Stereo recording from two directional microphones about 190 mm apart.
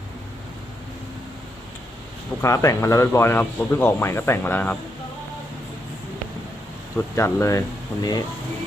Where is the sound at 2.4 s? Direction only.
15° left (ahead or behind).